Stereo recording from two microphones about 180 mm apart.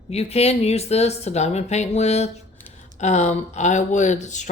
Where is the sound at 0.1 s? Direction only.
35° left (ahead or behind).